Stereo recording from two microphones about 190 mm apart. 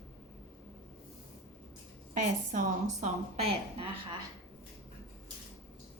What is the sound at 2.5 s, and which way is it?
Speech, 40° right (ahead or behind).